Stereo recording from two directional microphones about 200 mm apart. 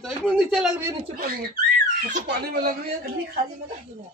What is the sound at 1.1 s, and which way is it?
A child's voice, 45° right (ahead or behind).